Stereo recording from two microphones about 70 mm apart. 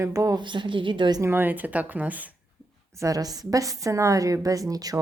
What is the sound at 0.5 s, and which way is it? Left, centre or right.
Speech, right.